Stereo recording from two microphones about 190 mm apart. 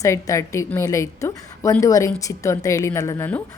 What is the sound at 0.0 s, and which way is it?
A woman's voice, 15° left (ahead or behind).